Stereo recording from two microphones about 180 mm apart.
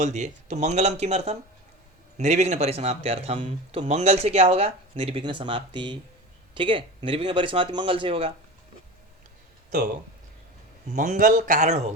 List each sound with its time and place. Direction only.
0.0 s speech: 40° right (ahead or behind)
10.9 s speech: 40° right (ahead or behind)